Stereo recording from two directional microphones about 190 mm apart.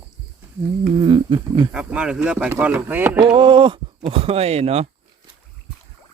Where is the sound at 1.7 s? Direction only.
5° right (ahead or behind).